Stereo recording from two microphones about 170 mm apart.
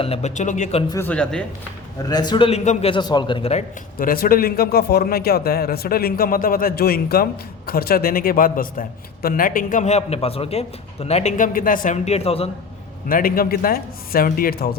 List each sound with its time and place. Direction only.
0.0 s speech: 40° left (ahead or behind)
0.9 s speech: 15° left (ahead or behind)
2.0 s a man's voice: 25° left (ahead or behind)
3.9 s a man's voice: 60° left (ahead or behind); by 12.5 s 35° left (ahead or behind)
13.1 s a man's voice: 55° left (ahead or behind)